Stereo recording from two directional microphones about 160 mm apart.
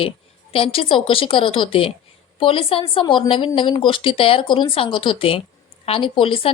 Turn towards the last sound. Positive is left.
turn(degrees=35)  # may be behind; listen again after turning